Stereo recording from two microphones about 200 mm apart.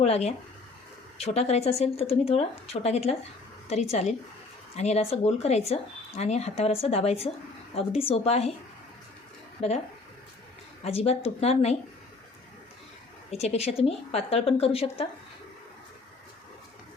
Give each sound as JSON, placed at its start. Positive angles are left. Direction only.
{"t": 0.0, "sound": "speech", "side_deg": 30}
{"t": 4.8, "sound": "speech", "side_deg": 35}
{"t": 9.6, "sound": "speech", "side_deg": 30}
{"t": 10.8, "sound": "speech", "side_deg": 30}
{"t": 13.3, "sound": "speech", "side_deg": 30}